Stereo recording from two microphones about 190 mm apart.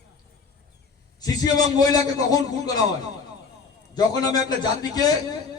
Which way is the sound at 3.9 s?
20° left (ahead or behind).